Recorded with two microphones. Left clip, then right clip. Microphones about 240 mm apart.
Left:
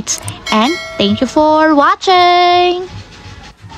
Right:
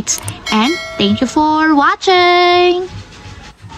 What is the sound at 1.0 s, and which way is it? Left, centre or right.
Speech, centre.